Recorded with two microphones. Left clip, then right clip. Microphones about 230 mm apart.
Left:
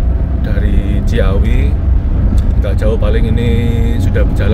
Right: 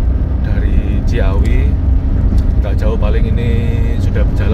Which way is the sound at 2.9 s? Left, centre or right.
Left.